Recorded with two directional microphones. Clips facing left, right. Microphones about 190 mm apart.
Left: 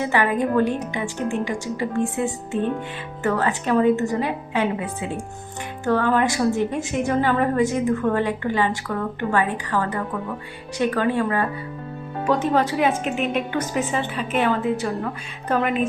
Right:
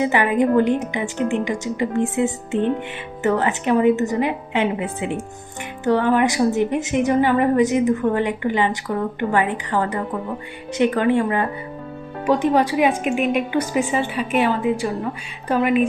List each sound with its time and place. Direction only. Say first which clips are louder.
0.0 s a woman's voice: right 3 dB; 20° right (ahead or behind)